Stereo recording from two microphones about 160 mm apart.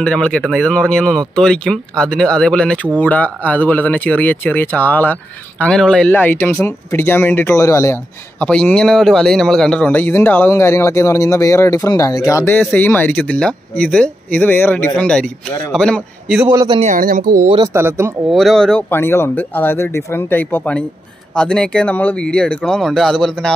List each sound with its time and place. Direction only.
0.0 s speech: 5° left (ahead or behind)
16.4 s a man's voice: 30° right (ahead or behind)
16.8 s speech: 60° right (ahead or behind)
17.7 s speech: 15° right (ahead or behind)
18.3 s speech: centre (ahead or behind)